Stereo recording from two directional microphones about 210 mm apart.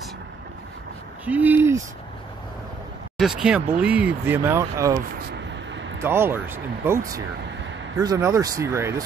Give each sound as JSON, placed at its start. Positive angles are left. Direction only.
{"t": 1.2, "sound": "speech", "side_deg": -10}
{"t": 3.2, "sound": "speech", "side_deg": 0}
{"t": 5.3, "sound": "vehicle", "side_deg": -60}
{"t": 5.9, "sound": "speech", "side_deg": -10}